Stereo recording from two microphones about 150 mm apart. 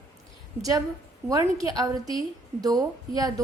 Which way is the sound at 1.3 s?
20° right (ahead or behind).